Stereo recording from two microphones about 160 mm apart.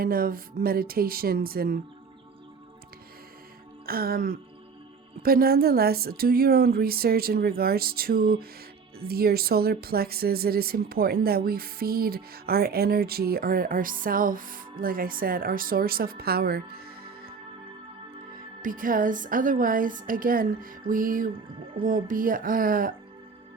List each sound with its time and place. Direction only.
0.0 s speech: 65° right (ahead or behind)
3.8 s speech: 70° right (ahead or behind)
18.6 s a woman's voice: 60° right (ahead or behind)